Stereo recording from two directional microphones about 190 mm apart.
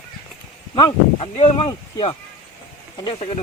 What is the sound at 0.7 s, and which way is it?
Speech, 25° left (ahead or behind).